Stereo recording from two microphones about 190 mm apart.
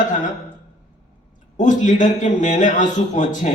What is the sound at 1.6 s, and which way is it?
A man's voice, 40° left (ahead or behind).